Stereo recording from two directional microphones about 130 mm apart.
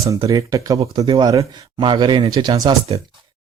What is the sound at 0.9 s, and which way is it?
Speech, 35° right (ahead or behind).